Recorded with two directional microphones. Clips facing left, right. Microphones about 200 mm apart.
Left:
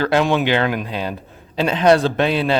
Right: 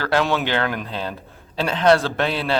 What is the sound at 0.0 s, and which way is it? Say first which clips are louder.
A man's voice: left 4 dB; 20° left (ahead or behind).